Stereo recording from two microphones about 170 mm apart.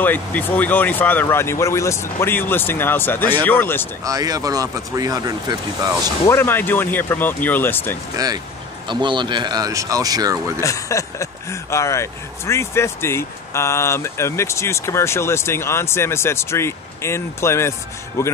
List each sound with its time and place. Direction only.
0.0 s speech: 10° left (ahead or behind)
4.0 s speech: 20° right (ahead or behind)
6.2 s speech: 15° left (ahead or behind)
8.8 s speech: 25° right (ahead or behind)
10.6 s speech: 20° left (ahead or behind)